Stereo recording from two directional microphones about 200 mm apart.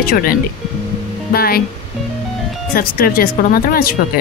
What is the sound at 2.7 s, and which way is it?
Speech, 50° left (ahead or behind).